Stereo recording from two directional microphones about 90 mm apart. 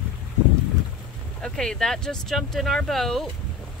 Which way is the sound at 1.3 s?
10° left (ahead or behind).